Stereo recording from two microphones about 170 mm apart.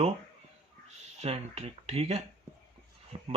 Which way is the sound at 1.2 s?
40° right (ahead or behind).